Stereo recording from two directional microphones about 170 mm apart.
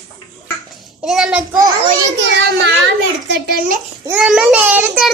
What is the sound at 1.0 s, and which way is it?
Child singing, 5° right (ahead or behind).